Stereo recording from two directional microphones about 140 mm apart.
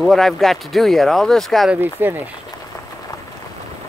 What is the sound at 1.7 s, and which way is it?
Speech, 15° right (ahead or behind).